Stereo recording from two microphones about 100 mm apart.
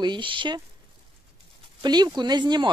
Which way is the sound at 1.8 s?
45° right (ahead or behind).